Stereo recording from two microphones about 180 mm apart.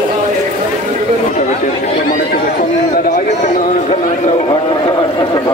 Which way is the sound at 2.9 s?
50° left (ahead or behind).